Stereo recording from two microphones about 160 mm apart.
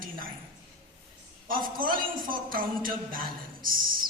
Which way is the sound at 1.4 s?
60° right (ahead or behind).